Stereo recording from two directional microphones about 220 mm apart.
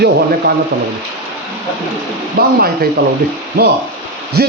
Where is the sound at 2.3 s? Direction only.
45° right (ahead or behind).